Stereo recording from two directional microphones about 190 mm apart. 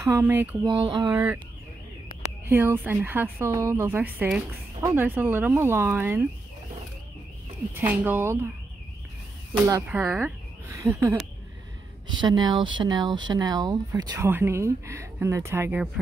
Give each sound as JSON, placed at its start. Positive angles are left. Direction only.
{"t": 0.0, "sound": "speech", "side_deg": -15}
{"t": 0.7, "sound": "speech", "side_deg": -20}
{"t": 1.1, "sound": "speech", "side_deg": -10}
{"t": 2.4, "sound": "speech", "side_deg": -10}
{"t": 7.7, "sound": "speech", "side_deg": -10}
{"t": 9.8, "sound": "speech", "side_deg": -10}